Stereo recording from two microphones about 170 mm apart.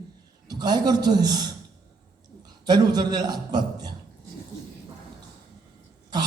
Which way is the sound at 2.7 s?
25° right (ahead or behind).